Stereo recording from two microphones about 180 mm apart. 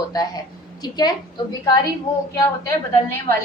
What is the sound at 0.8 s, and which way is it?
Speech, 20° left (ahead or behind).